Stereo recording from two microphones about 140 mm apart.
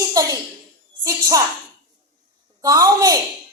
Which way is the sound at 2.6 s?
25° right (ahead or behind).